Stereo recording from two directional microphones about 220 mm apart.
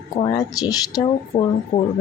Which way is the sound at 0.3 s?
15° left (ahead or behind).